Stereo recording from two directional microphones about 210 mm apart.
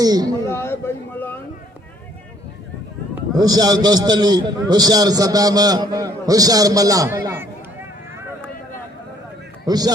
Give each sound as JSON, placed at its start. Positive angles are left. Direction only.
{"t": 0.0, "sound": "a man's voice", "side_deg": -20}
{"t": 0.4, "sound": "speech", "side_deg": 10}
{"t": 3.3, "sound": "a man's voice", "side_deg": -20}
{"t": 9.6, "sound": "a man's voice", "side_deg": -20}